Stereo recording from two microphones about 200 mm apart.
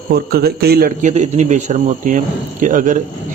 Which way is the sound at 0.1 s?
50° right (ahead or behind).